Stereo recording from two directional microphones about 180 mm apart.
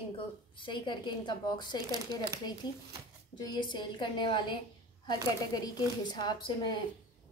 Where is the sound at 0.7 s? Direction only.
25° left (ahead or behind).